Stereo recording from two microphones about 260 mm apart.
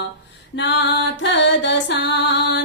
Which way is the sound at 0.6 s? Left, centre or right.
Left.